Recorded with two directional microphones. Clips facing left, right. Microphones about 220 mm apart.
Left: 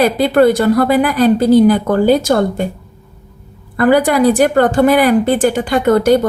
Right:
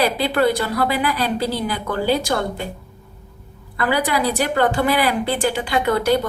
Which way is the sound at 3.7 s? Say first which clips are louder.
Left 9 dB; 50° left (ahead or behind).